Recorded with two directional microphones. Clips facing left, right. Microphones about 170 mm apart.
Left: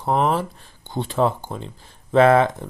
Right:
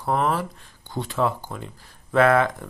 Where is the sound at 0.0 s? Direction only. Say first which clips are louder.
Left 3 dB; 25° left (ahead or behind).